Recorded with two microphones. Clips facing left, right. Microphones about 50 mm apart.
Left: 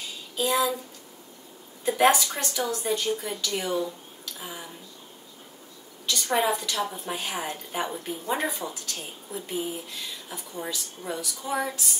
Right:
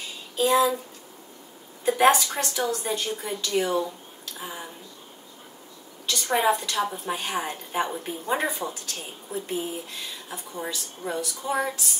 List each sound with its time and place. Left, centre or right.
0.5 s speech: right
1.9 s a woman's voice: centre
6.0 s a woman's voice: centre